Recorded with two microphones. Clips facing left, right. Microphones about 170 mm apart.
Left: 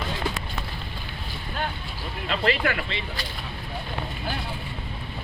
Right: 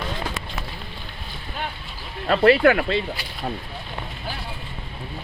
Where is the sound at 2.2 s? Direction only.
50° right (ahead or behind).